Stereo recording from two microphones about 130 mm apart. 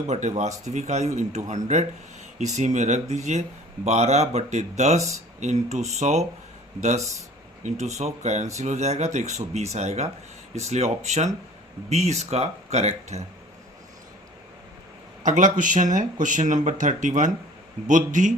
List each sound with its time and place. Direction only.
0.1 s speech: 65° right (ahead or behind)
7.6 s speech: 60° right (ahead or behind)
15.2 s speech: 80° right